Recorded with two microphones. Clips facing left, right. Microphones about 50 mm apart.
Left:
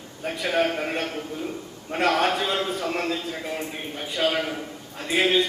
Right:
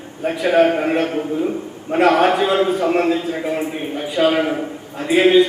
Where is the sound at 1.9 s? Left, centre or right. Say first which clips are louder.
Right 8 dB; centre.